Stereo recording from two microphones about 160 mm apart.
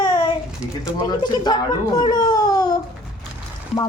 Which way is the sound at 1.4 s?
25° left (ahead or behind).